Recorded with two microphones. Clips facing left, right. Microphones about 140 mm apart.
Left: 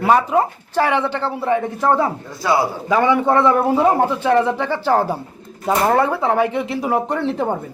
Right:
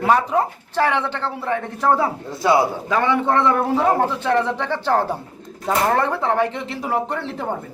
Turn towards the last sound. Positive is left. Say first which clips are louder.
# left 4 dB
turn(degrees=15)  # may be behind; listen again after turning